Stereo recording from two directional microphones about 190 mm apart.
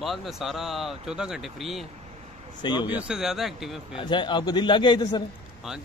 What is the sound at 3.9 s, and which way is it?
Speech, 25° left (ahead or behind).